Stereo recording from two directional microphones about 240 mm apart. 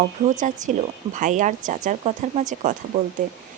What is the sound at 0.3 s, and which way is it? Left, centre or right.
Speech, right.